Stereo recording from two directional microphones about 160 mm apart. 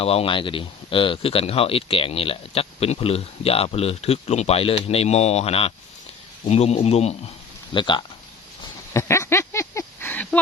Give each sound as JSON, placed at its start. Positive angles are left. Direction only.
{"t": 0.0, "sound": "speech", "side_deg": 40}
{"t": 7.7, "sound": "speech", "side_deg": 30}
{"t": 8.9, "sound": "a sound", "side_deg": 20}